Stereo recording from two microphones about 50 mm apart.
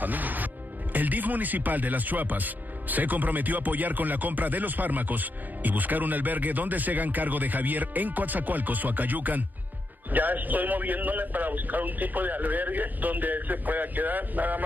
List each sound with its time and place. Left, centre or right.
0.0 s speech: right